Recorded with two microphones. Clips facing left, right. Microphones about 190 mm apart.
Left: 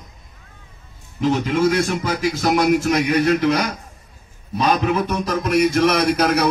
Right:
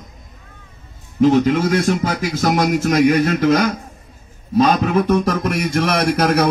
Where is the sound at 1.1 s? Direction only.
50° right (ahead or behind).